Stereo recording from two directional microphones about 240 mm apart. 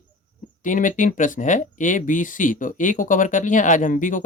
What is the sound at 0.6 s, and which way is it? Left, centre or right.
Speech, left.